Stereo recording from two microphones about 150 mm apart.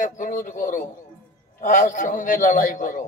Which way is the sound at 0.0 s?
60° left (ahead or behind).